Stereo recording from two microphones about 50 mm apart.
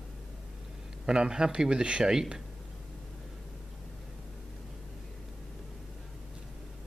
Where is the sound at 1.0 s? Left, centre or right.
Centre.